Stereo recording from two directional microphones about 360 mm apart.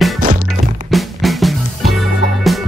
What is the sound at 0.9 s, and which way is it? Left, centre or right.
Music, centre.